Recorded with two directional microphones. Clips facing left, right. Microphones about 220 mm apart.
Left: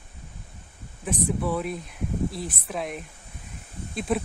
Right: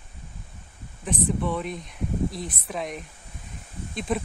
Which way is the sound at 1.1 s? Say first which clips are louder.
Even; 5° left (ahead or behind).